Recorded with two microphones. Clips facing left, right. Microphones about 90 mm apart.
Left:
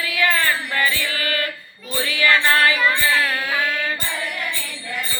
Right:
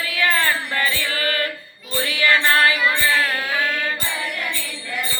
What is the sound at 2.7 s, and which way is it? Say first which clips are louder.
Music: left 1 dB; 5° right (ahead or behind).